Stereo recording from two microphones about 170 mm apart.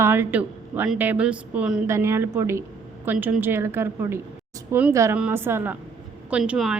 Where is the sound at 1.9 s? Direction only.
15° right (ahead or behind).